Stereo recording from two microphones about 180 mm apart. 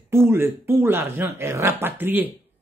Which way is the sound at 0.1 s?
15° right (ahead or behind).